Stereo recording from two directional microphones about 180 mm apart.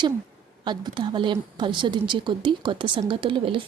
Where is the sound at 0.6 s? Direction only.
25° right (ahead or behind).